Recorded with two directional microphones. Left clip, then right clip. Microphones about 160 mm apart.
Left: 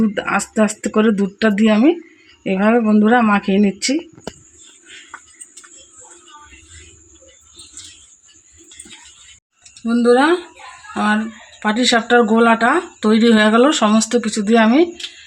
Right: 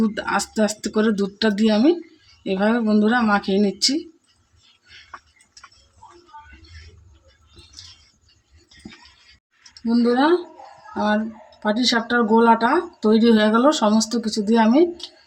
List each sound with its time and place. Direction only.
0.1 s speech: 40° left (ahead or behind)
9.9 s speech: 40° left (ahead or behind)